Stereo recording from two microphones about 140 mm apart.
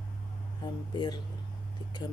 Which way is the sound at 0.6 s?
30° left (ahead or behind).